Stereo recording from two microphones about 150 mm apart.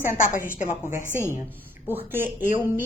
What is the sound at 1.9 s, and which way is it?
Speech, 15° right (ahead or behind).